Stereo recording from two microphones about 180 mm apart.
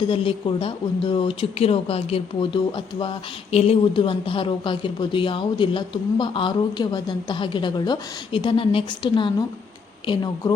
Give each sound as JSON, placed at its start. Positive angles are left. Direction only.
{"t": 0.1, "sound": "speech", "side_deg": 30}